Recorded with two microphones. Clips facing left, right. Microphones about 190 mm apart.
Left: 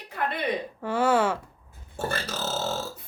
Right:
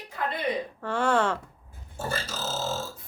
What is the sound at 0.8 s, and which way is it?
Speech, 5° left (ahead or behind).